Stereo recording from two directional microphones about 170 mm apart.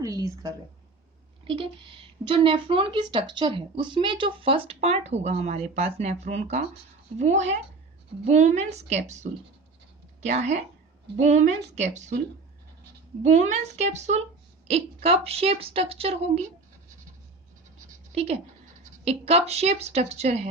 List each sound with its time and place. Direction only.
0.0 s a sound: 20° right (ahead or behind)
1.5 s a woman's voice: 30° right (ahead or behind)
13.2 s a woman's voice: 45° right (ahead or behind)
18.1 s a woman's voice: 35° right (ahead or behind)